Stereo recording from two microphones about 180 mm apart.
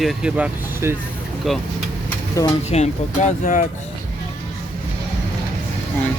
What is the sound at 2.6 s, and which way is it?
Speech, 40° left (ahead or behind).